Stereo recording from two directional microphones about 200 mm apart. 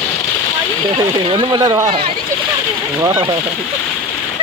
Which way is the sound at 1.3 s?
20° right (ahead or behind).